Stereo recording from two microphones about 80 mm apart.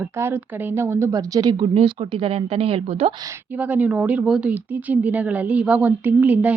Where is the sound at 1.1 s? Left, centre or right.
Right.